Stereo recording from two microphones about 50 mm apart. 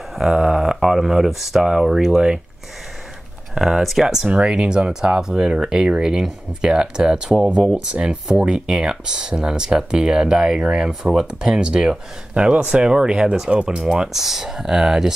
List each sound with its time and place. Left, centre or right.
0.1 s speech: centre
3.5 s speech: centre
4.3 s speech: right